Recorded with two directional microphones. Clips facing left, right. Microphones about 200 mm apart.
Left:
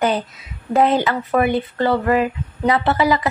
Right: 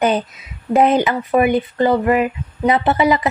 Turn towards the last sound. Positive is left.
turn(degrees=-20)  # may be behind; listen again after turning